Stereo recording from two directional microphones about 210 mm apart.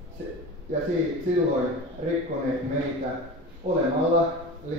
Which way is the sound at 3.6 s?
35° right (ahead or behind).